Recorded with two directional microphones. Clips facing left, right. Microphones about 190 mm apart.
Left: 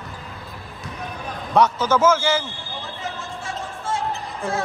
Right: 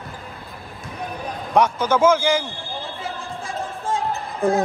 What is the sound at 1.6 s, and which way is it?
Speech, 10° right (ahead or behind).